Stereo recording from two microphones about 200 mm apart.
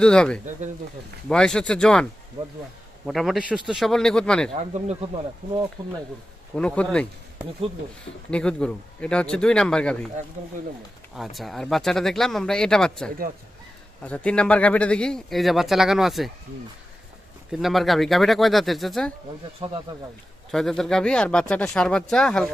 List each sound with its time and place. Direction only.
0.0 s a man's voice: 5° left (ahead or behind)
3.1 s a man's voice: centre (ahead or behind)
4.5 s speech: 35° right (ahead or behind)
5.8 s speech: 20° right (ahead or behind)
6.5 s a man's voice: 5° left (ahead or behind)
8.3 s a man's voice: 5° left (ahead or behind)
11.2 s a man's voice: centre (ahead or behind)
17.5 s a man's voice: centre (ahead or behind)
19.5 s speech: 30° right (ahead or behind)
20.5 s a man's voice: centre (ahead or behind)